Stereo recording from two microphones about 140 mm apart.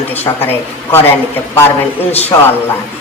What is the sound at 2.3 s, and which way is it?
Speech, 20° left (ahead or behind).